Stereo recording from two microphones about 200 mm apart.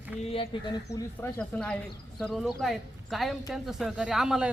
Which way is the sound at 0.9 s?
10° left (ahead or behind).